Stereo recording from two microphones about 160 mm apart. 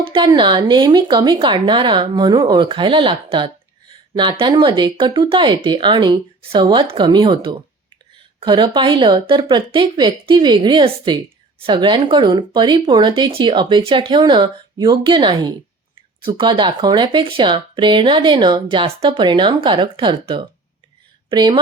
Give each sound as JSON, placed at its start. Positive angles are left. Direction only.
{"t": 0.0, "sound": "speech", "side_deg": -30}